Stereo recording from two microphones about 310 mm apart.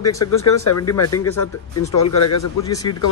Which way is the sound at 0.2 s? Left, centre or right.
Left.